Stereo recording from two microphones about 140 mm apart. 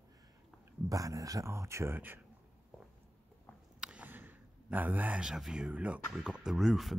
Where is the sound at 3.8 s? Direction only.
10° right (ahead or behind).